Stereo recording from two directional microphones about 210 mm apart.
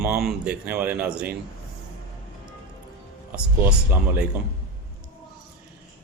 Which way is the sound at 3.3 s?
5° right (ahead or behind).